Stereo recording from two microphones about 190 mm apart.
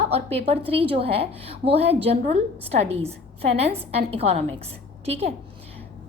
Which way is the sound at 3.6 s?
30° right (ahead or behind).